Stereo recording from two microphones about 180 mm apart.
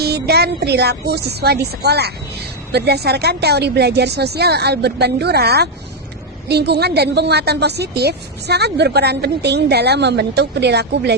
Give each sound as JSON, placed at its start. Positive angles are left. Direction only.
{"t": 0.0, "sound": "a woman's voice", "side_deg": -65}